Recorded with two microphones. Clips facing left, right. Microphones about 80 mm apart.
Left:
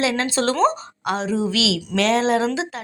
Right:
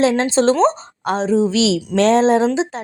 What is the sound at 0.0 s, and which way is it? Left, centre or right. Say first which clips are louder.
A woman's voice: right 6 dB; right.